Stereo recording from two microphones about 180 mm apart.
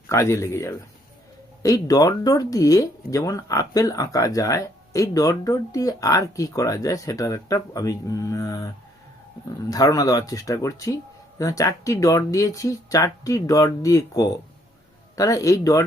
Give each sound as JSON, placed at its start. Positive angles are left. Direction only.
{"t": 0.1, "sound": "a man's voice", "side_deg": 15}